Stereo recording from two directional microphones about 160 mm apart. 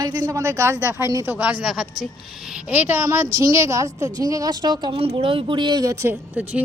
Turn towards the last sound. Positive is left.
turn(degrees=-10)  # may be behind; listen again after turning